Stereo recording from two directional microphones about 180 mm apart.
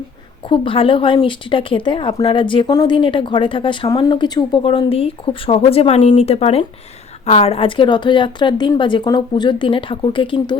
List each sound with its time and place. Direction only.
0.4 s speech: 30° left (ahead or behind)